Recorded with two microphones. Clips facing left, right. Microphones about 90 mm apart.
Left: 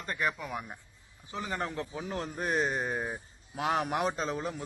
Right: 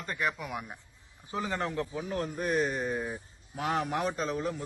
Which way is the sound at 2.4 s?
35° left (ahead or behind).